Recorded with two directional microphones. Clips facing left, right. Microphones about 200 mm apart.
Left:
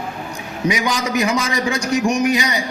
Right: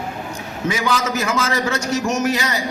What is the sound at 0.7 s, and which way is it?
A man's voice, 15° left (ahead or behind).